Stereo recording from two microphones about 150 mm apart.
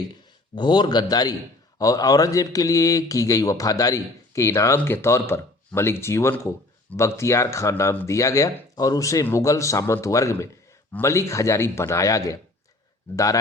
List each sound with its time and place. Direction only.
0.5 s speech: 30° left (ahead or behind)